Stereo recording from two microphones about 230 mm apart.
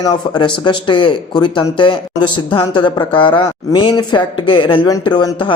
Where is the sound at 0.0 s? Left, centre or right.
Centre.